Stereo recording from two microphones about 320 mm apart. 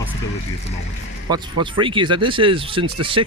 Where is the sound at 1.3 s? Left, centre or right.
Centre.